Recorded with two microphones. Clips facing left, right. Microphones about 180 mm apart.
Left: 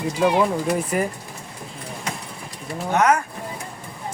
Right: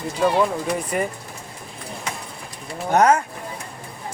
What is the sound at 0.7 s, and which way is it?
Speech, centre (ahead or behind).